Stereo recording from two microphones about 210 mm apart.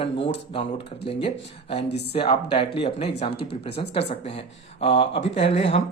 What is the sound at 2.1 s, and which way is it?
Speech, 25° left (ahead or behind).